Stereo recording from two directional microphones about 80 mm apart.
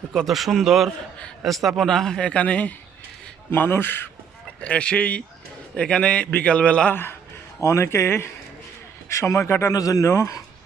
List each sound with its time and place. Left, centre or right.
0.1 s a man's voice: centre
3.5 s speech: left
4.6 s a man's voice: centre
6.9 s speech: left
10.1 s speech: left